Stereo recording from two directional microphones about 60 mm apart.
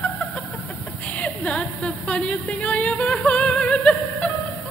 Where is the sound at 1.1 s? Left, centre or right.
Left.